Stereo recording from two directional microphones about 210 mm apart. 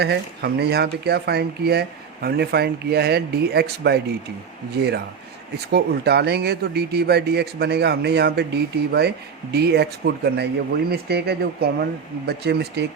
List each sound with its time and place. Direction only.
0.0 s speech: 50° right (ahead or behind)
5.7 s speech: 50° right (ahead or behind)